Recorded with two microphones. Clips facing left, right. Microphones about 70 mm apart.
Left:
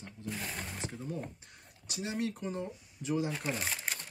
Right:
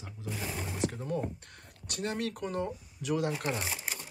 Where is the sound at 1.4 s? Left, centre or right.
Right.